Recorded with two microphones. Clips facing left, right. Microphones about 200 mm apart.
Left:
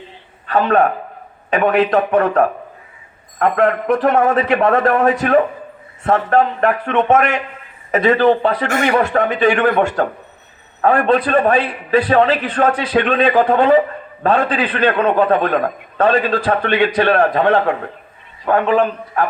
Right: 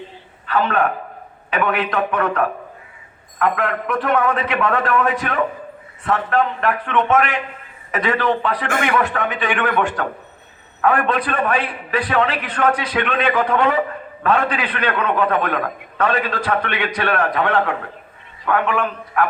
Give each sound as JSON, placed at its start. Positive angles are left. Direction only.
{"t": 0.4, "sound": "a man's voice", "side_deg": 40}